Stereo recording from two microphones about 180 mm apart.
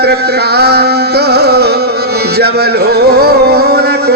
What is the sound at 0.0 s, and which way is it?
Music, 65° right (ahead or behind).